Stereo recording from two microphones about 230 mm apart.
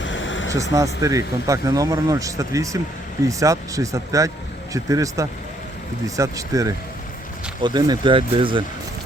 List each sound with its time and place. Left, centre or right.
0.0 s vehicle: left
0.5 s speech: centre